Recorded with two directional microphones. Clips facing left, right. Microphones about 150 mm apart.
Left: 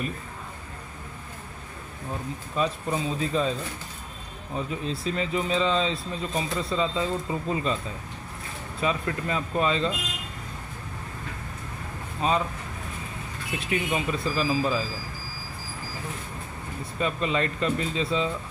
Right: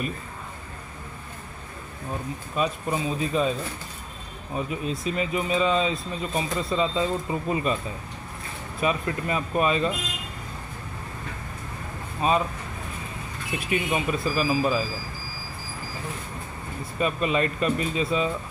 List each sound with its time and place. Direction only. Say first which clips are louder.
2.5 s speech: right 1 dB; 15° right (ahead or behind)
4.6 s speech: right 2 dB; 15° right (ahead or behind)
8.8 s speech: right 2 dB; 15° right (ahead or behind)
12.2 s speech: right 2 dB; 20° right (ahead or behind)
13.7 s speech: right 2 dB; 20° right (ahead or behind)
17.0 s speech: right 2 dB; 15° right (ahead or behind)